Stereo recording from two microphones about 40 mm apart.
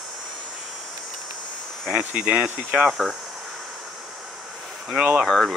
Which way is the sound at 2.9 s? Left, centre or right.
Centre.